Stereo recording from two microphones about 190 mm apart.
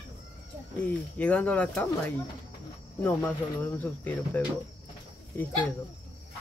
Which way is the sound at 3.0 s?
10° left (ahead or behind).